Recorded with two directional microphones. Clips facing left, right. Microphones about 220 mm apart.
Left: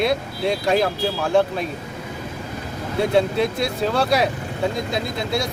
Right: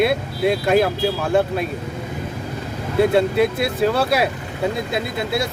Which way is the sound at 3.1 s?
5° right (ahead or behind).